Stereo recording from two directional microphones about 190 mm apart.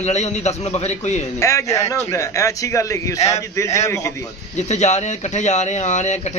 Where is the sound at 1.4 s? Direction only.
15° left (ahead or behind).